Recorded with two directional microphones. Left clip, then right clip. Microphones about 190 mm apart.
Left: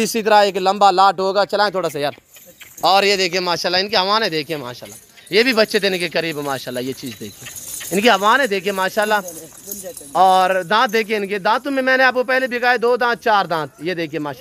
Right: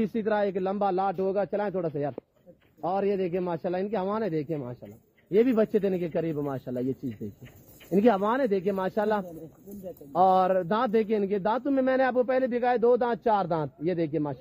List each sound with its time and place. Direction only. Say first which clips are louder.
0.0 s speech: left 13 dB; 40° left (ahead or behind); by 2.1 s 20° left (ahead or behind)
2.8 s speech: left 14 dB; 35° left (ahead or behind)
3.1 s speech: left 11 dB; 15° left (ahead or behind)
6.3 s speech: left 9 dB; 25° left (ahead or behind)
7.9 s speech: left 10 dB; 10° left (ahead or behind)
10.2 s speech: left 8 dB; 5° right (ahead or behind)